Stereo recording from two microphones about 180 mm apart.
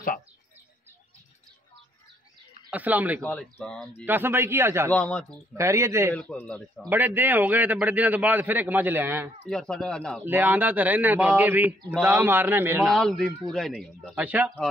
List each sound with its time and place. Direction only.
2.7 s a man's voice: 10° right (ahead or behind)
3.2 s speech: 5° left (ahead or behind)
4.0 s a man's voice: 10° right (ahead or behind)
4.9 s speech: 5° left (ahead or behind)
5.5 s a man's voice: 15° right (ahead or behind)
6.1 s speech: 5° left (ahead or behind)
6.9 s a man's voice: 10° right (ahead or behind)
9.5 s speech: 5° left (ahead or behind)
10.2 s a man's voice: 10° right (ahead or behind)
12.8 s speech: centre (ahead or behind)